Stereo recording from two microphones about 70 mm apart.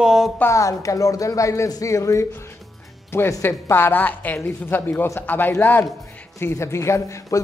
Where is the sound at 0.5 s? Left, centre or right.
Left.